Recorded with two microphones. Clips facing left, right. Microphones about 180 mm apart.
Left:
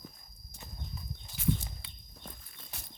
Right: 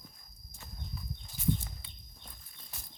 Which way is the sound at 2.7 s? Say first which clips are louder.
Left 3 dB; 75° left (ahead or behind).